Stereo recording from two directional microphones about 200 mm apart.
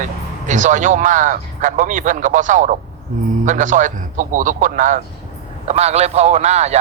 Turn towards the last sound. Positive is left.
turn(degrees=-35)  # may be behind; listen again after turning